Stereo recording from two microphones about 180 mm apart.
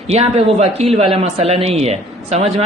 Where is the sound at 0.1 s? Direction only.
35° right (ahead or behind).